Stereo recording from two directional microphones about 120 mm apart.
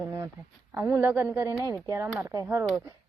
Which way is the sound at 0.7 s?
20° right (ahead or behind).